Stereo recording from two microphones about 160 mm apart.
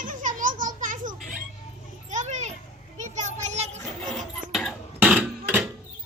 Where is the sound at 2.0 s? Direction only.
50° right (ahead or behind).